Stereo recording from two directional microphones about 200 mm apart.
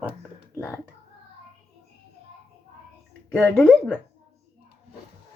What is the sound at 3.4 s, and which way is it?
Speech, centre (ahead or behind).